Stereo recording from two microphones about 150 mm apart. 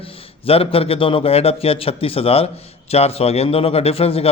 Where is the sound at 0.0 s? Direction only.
40° left (ahead or behind).